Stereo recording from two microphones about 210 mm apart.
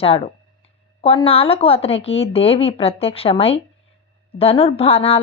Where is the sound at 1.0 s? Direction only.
25° left (ahead or behind).